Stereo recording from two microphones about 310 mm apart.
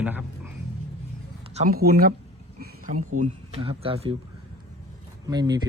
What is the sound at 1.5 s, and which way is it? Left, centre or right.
Speech, right.